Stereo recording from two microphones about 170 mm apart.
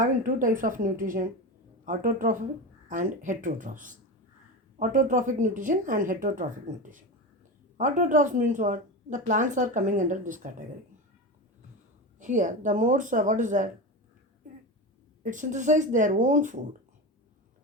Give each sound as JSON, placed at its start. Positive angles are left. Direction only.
{"t": 0.0, "sound": "a woman's voice", "side_deg": -50}
{"t": 7.8, "sound": "a woman's voice", "side_deg": -50}
{"t": 12.2, "sound": "a woman's voice", "side_deg": -50}
{"t": 15.2, "sound": "a woman's voice", "side_deg": -50}